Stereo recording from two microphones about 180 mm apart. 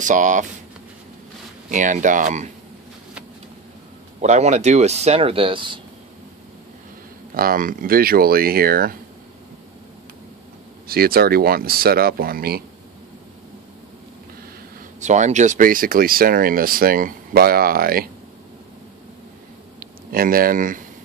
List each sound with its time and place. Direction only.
0.0 s speech: 45° right (ahead or behind)
1.7 s speech: 45° right (ahead or behind)
4.2 s speech: 40° right (ahead or behind)
7.3 s speech: 50° right (ahead or behind)
10.9 s speech: 55° right (ahead or behind)
15.0 s speech: 40° right (ahead or behind)
19.8 s speech: 55° right (ahead or behind)